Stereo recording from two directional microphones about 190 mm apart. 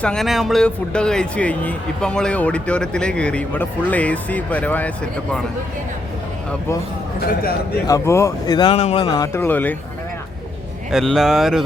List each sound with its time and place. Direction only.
0.0 s a man's voice: 5° left (ahead or behind)
7.3 s a man's voice: 50° left (ahead or behind)
7.9 s speech: 15° left (ahead or behind)
10.9 s a man's voice: centre (ahead or behind)